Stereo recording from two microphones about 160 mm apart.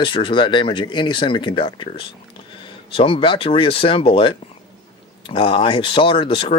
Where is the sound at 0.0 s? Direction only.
30° left (ahead or behind).